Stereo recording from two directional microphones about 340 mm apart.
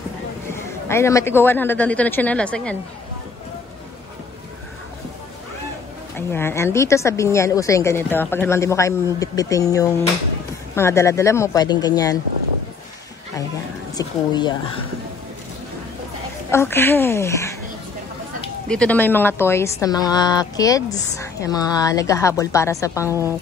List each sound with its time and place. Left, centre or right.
0.5 s a man's voice: centre
6.1 s a woman's voice: centre
13.9 s a woman's voice: centre
16.4 s a woman's voice: centre
18.7 s a woman's voice: centre